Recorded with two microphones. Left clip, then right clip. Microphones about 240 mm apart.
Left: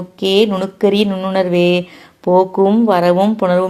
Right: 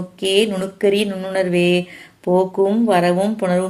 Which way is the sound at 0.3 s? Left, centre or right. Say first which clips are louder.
Left 4 dB; left.